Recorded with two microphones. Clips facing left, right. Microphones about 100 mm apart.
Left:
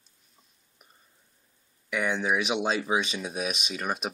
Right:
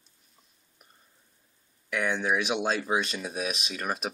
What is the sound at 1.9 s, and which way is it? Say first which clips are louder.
Speech: even; centre (ahead or behind).